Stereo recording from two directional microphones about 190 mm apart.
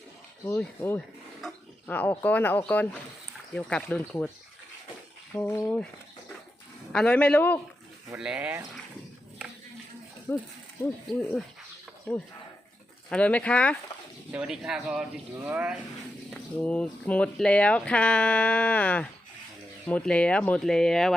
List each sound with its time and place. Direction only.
0.4 s speech: 10° left (ahead or behind)
5.3 s speech: 10° left (ahead or behind)
6.9 s speech: 5° left (ahead or behind)
8.1 s speech: 5° right (ahead or behind)
11.2 s speech: 10° left (ahead or behind)
13.1 s speech: 5° left (ahead or behind)
14.3 s speech: 5° right (ahead or behind)
16.3 s speech: 5° left (ahead or behind)